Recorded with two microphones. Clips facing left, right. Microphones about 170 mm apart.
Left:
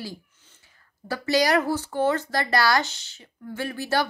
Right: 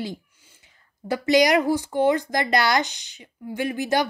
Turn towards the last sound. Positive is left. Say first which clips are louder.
# right 3 dB
turn(degrees=-15)  # may be behind; listen again after turning